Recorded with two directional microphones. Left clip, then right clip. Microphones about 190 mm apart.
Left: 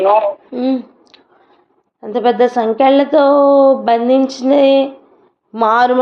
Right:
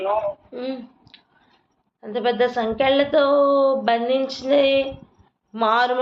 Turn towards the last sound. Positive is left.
turn(degrees=35)  # may be behind; listen again after turning